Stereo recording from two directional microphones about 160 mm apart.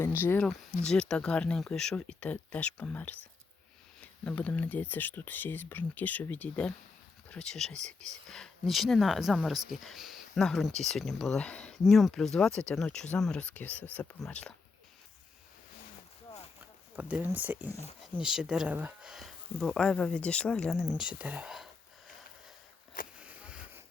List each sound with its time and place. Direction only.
0.2 s speech: 15° left (ahead or behind)
7.7 s speech: 45° right (ahead or behind)
8.3 s speech: centre (ahead or behind)
16.9 s speech: 10° right (ahead or behind)
23.1 s a sound: 10° right (ahead or behind)